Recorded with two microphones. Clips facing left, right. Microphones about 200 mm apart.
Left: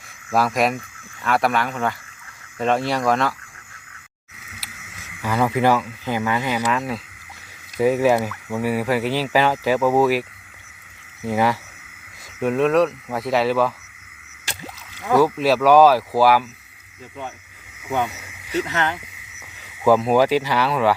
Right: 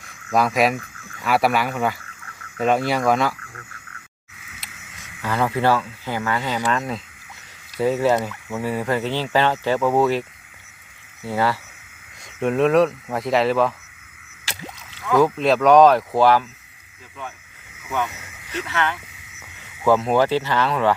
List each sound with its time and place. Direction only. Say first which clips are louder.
0.3 s speech: right 1 dB; 5° left (ahead or behind)
5.2 s speech: left 2 dB; 10° left (ahead or behind)
12.4 s speech: right 1 dB; centre (ahead or behind)
15.1 s speech: even; 5° left (ahead or behind)
17.8 s speech: left 2 dB; 30° left (ahead or behind)
18.1 s speech: left 6 dB; 10° left (ahead or behind)
18.7 s speech: right 5 dB; 35° left (ahead or behind)
19.4 s speech: left 2 dB; 10° left (ahead or behind)